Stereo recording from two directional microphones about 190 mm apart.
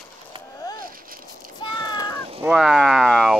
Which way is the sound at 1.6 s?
20° left (ahead or behind).